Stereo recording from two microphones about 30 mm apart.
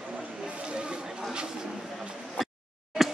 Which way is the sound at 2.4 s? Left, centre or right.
Centre.